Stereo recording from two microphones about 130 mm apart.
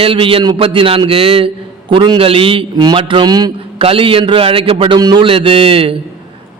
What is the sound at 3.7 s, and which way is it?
A man's voice, 45° right (ahead or behind).